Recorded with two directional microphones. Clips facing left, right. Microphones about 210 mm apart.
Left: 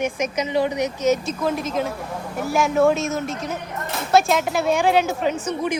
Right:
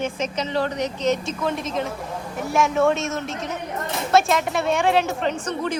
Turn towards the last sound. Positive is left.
turn(degrees=10)  # may be behind; listen again after turning